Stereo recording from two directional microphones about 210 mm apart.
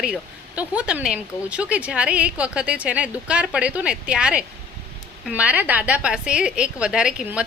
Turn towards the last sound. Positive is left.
turn(degrees=-5)  # may be behind; listen again after turning